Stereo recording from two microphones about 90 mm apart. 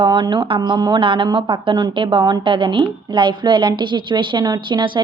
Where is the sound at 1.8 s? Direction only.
65° right (ahead or behind).